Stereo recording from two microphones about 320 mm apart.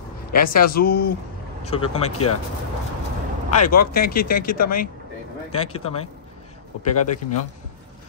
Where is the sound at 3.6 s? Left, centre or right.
Left.